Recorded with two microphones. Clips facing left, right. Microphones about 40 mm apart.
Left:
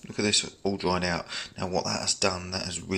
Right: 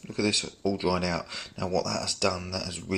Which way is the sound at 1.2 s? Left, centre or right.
Left.